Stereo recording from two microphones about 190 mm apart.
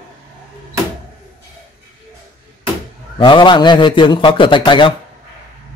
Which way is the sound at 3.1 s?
25° left (ahead or behind).